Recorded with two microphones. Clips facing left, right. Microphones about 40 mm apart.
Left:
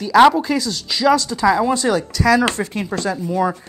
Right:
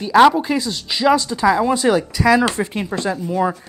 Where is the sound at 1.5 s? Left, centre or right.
Centre.